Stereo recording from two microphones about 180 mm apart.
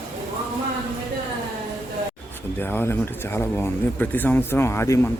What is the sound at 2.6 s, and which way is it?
Speech, 10° left (ahead or behind).